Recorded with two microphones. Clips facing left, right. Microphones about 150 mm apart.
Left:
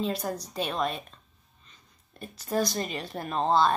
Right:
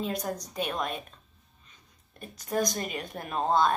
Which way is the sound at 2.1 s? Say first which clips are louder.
Left 1 dB; 15° right (ahead or behind).